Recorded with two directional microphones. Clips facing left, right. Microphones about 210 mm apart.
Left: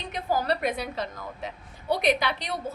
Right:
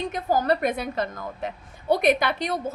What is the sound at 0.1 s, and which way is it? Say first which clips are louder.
A woman's voice: right 1 dB; 45° right (ahead or behind).